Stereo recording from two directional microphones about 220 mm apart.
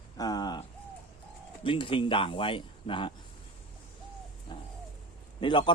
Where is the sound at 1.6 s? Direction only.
25° left (ahead or behind).